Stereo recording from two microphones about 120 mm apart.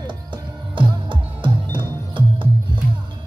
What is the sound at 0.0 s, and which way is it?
Music, 40° right (ahead or behind).